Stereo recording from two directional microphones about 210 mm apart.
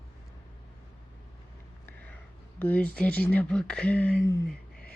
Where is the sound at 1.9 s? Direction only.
10° left (ahead or behind).